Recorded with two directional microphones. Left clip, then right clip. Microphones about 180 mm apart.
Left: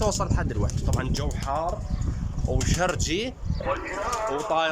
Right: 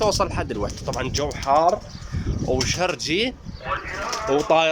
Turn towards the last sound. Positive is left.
turn(degrees=-15)  # may be behind; listen again after turning